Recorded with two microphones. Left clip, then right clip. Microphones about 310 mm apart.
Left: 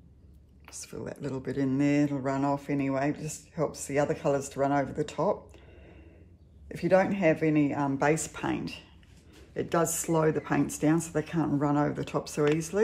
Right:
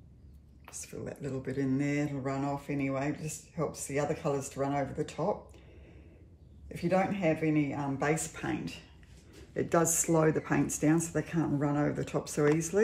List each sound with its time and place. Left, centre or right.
0.8 s speech: centre
6.7 s speech: centre
9.5 s speech: centre